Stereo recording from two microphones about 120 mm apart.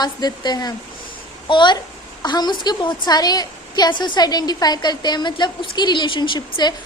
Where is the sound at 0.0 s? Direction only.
35° left (ahead or behind).